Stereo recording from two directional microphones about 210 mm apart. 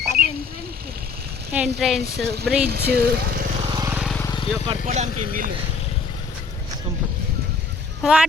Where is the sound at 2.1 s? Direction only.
50° right (ahead or behind).